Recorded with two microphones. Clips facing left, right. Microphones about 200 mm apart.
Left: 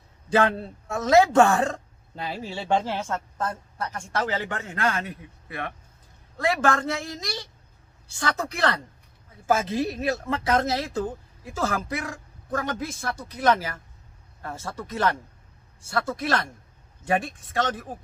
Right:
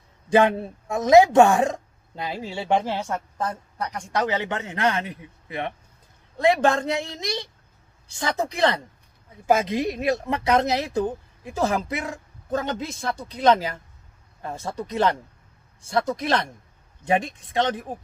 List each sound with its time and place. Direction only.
0.3 s a woman's voice: 15° right (ahead or behind)